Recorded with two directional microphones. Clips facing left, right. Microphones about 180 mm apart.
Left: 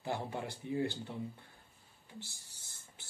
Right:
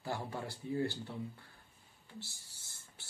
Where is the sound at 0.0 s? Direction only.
20° left (ahead or behind).